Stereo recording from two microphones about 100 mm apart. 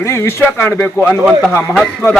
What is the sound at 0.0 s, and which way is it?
Speech, 30° left (ahead or behind).